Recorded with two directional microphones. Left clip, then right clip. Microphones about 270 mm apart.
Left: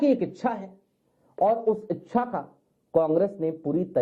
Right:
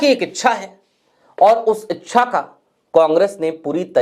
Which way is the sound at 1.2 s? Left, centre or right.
Centre.